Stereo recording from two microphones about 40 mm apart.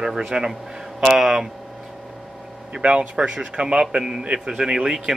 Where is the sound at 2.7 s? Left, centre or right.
Right.